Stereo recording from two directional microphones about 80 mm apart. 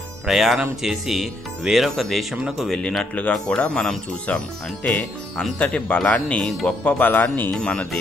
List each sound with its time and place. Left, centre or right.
0.3 s speech: centre
2.8 s speech: centre; by 7.5 s left
7.5 s speech: centre